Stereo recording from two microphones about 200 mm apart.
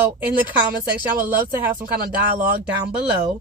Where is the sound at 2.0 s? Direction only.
45° right (ahead or behind).